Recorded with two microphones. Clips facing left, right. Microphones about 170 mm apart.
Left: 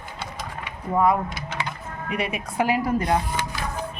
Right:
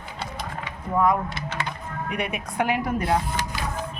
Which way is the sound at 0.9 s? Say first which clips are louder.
Left 1 dB; 10° left (ahead or behind).